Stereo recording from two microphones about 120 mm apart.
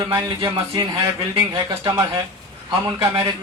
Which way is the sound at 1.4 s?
25° right (ahead or behind).